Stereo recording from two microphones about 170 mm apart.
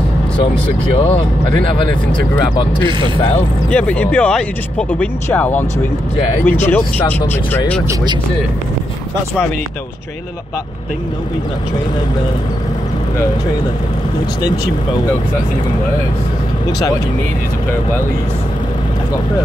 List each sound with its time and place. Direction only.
0.9 s speech: 35° left (ahead or behind)
3.7 s speech: 10° left (ahead or behind)